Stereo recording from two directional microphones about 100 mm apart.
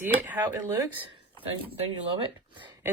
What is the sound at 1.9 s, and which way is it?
Speech, 50° right (ahead or behind).